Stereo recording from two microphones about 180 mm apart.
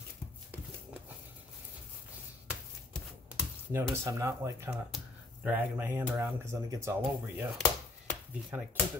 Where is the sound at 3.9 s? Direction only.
15° right (ahead or behind).